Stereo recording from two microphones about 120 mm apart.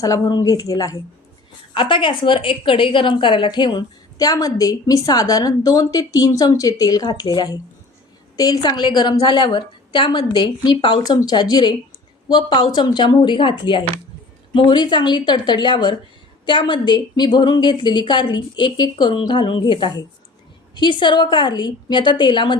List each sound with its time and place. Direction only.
0.0 s a woman's voice: 30° left (ahead or behind)
1.7 s a woman's voice: 45° left (ahead or behind)